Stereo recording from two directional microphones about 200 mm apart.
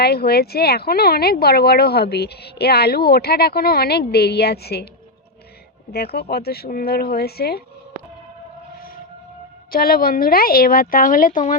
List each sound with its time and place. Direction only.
0.0 s speech: 55° left (ahead or behind)
5.9 s speech: 50° left (ahead or behind)
9.7 s speech: 45° left (ahead or behind)